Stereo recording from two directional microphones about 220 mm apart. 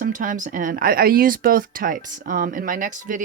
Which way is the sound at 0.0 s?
35° right (ahead or behind).